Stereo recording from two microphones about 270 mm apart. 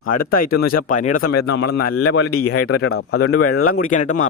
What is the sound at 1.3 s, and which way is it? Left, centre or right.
Speech, left.